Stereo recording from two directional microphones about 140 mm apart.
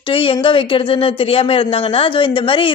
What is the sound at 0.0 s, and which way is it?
Speech, 40° left (ahead or behind).